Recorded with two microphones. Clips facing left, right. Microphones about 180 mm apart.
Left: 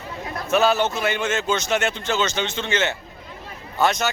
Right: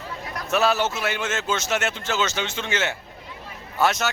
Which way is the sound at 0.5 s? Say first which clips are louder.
Left 3 dB; centre (ahead or behind).